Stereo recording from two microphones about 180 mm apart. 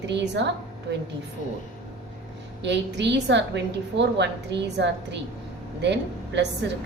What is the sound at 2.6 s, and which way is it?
A woman's voice, 75° right (ahead or behind).